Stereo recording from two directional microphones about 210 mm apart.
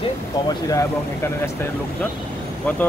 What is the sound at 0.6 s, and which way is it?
Speech, 15° left (ahead or behind).